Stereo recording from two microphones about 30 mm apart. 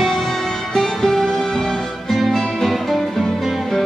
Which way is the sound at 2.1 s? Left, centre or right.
Centre.